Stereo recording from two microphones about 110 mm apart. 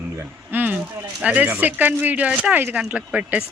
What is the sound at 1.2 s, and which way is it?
Speech, 15° right (ahead or behind).